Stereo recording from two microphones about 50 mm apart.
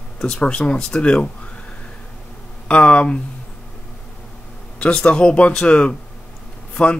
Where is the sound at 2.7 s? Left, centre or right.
Left.